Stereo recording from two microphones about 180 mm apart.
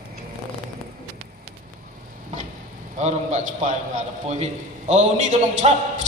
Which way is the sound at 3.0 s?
40° right (ahead or behind).